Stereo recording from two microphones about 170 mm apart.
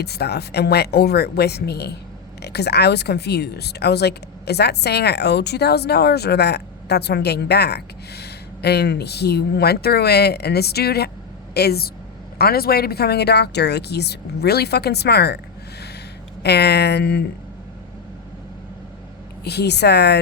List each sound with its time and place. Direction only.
0.0 s speech: 70° left (ahead or behind)
16.4 s speech: 75° left (ahead or behind)
19.5 s speech: 75° left (ahead or behind)